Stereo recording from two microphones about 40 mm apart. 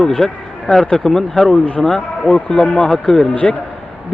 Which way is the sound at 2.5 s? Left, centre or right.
Left.